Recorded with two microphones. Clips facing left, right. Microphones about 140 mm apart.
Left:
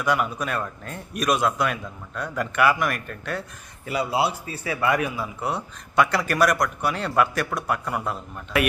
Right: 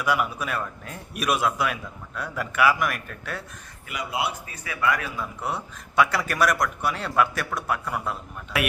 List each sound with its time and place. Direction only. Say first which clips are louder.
0.0 s speech: left 1 dB; 5° right (ahead or behind)
3.8 s a man's voice: left 5 dB; 30° left (ahead or behind)
5.1 s speech: left 2 dB; 5° left (ahead or behind)